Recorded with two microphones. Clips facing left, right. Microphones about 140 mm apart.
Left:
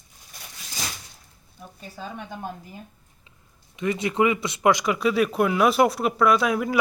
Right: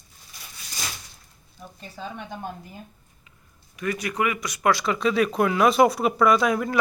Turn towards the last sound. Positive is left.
turn(degrees=5)  # may be behind; listen again after turning